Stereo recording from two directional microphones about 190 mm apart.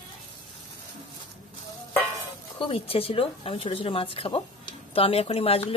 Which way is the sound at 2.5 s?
30° left (ahead or behind).